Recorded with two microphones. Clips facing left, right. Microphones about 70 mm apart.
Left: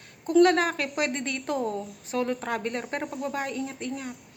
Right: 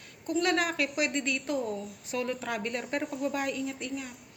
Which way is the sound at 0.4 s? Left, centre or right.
Left.